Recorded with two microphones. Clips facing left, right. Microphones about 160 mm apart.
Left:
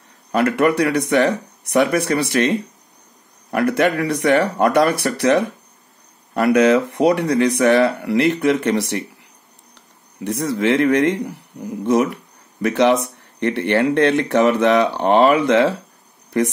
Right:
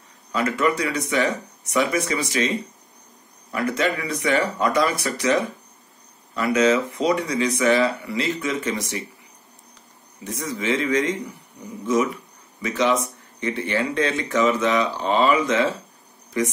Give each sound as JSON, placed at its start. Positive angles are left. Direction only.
{"t": 0.3, "sound": "speech", "side_deg": 60}
{"t": 3.5, "sound": "speech", "side_deg": 60}
{"t": 10.2, "sound": "speech", "side_deg": 65}